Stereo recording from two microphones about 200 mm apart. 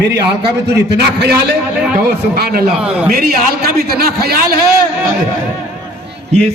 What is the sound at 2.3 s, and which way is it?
Speech, 50° right (ahead or behind).